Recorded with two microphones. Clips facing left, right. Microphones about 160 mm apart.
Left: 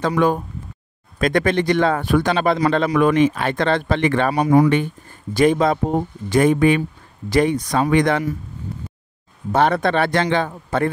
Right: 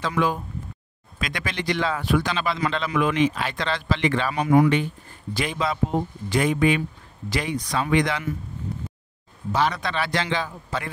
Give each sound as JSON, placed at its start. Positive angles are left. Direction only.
{"t": 0.0, "sound": "speech", "side_deg": 50}
{"t": 4.3, "sound": "speech", "side_deg": 35}
{"t": 5.3, "sound": "speech", "side_deg": 50}
{"t": 9.5, "sound": "speech", "side_deg": 55}